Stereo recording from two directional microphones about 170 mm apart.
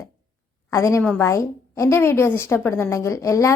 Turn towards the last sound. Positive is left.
turn(degrees=15)  # may be behind; listen again after turning